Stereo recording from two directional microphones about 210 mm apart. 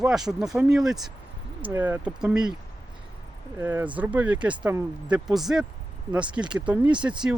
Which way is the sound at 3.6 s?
10° right (ahead or behind).